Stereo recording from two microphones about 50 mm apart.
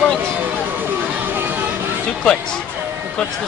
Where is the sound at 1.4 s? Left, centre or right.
Right.